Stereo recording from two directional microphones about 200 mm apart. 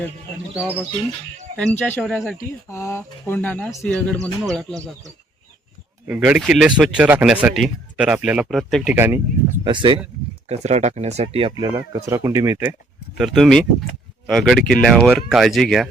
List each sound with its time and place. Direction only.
1.5 s speech: 5° left (ahead or behind)
2.6 s speech: 15° left (ahead or behind)
9.0 s speech: 10° right (ahead or behind)
9.6 s speech: 25° right (ahead or behind)
10.5 s speech: 35° right (ahead or behind)
11.7 s speech: 15° right (ahead or behind)
13.1 s speech: centre (ahead or behind)